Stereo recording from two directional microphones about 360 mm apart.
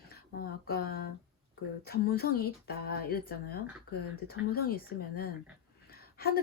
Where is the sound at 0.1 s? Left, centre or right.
Left.